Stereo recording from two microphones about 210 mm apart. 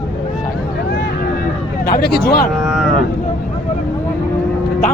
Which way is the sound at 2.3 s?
45° left (ahead or behind).